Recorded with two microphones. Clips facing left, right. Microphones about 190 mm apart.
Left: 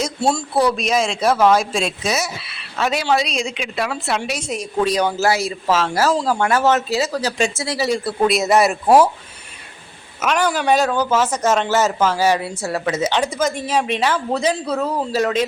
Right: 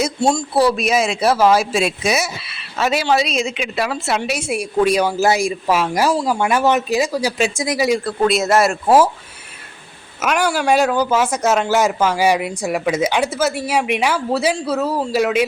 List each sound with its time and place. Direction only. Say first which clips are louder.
0.2 s a man's voice: right 1 dB; 5° left (ahead or behind); by 8.0 s 10° right (ahead or behind)
8.0 s speech: right 1 dB; 5° left (ahead or behind)
10.2 s a man's voice: right 1 dB; 10° right (ahead or behind)